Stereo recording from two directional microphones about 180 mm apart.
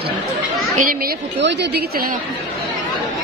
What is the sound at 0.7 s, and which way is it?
Speech, 50° right (ahead or behind).